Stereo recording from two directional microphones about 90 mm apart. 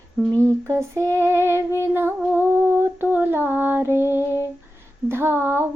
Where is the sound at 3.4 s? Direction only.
20° right (ahead or behind).